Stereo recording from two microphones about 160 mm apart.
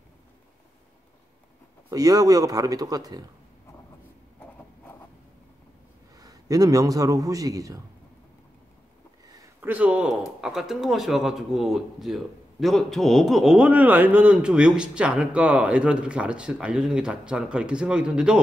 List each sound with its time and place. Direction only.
1.9 s speech: 25° right (ahead or behind)
6.1 s a man's voice: 20° right (ahead or behind)
9.2 s a sound: 15° right (ahead or behind)
10.4 s speech: centre (ahead or behind)